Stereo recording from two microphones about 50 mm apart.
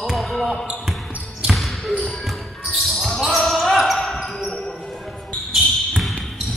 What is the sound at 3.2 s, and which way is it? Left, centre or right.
Basketball bounce, centre.